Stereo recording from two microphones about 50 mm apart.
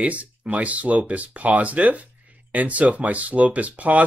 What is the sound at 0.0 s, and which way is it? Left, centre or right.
Speech, right.